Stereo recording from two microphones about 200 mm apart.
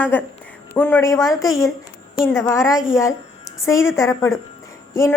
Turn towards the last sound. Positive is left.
turn(degrees=15)  # may be behind; listen again after turning